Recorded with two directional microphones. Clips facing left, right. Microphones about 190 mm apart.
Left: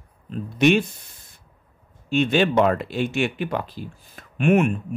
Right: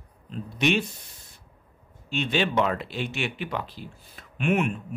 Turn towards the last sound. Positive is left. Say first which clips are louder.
# left 6 dB
turn(degrees=50)  # may be behind; listen again after turning